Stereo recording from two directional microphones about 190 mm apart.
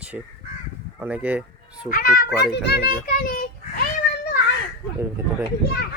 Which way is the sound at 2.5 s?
60° left (ahead or behind).